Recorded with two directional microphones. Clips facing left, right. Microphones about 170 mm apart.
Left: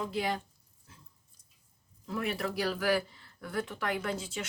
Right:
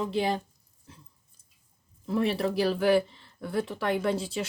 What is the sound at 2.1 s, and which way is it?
Speech, 30° right (ahead or behind).